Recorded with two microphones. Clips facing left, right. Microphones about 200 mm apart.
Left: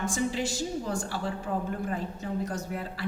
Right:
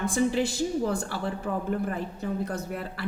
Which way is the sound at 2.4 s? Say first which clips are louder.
Right 1 dB; 60° right (ahead or behind).